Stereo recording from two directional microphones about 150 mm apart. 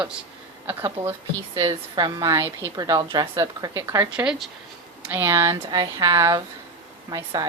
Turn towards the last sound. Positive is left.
turn(degrees=-25)  # may be behind; listen again after turning